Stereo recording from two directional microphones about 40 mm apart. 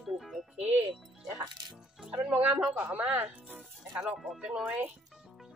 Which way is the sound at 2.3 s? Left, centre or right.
Right.